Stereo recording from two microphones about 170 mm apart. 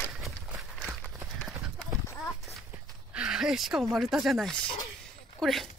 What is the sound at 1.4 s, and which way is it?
Clip-clop, 5° left (ahead or behind).